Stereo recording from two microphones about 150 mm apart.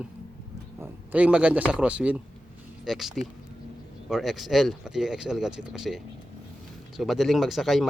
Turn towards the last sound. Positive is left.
turn(degrees=0)  # may be behind; listen again after turning